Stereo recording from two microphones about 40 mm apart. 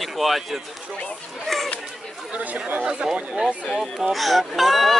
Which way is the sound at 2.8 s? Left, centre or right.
Centre.